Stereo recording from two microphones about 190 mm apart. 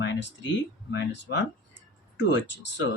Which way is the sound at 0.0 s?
65° left (ahead or behind).